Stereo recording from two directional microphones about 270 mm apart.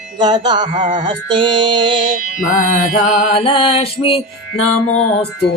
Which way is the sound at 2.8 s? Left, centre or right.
Left.